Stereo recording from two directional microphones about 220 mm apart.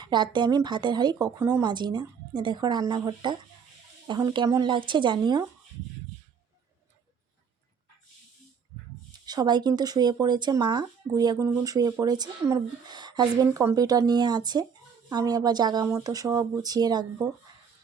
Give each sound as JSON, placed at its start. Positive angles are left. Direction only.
{"t": 0.0, "sound": "a woman's voice", "side_deg": -20}
{"t": 9.2, "sound": "speech", "side_deg": -20}